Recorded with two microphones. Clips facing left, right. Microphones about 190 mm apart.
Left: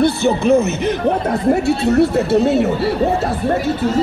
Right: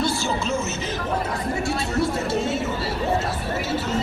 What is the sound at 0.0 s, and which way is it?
Speech, 60° left (ahead or behind).